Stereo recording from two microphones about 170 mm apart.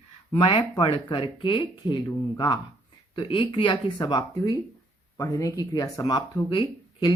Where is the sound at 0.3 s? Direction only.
30° left (ahead or behind).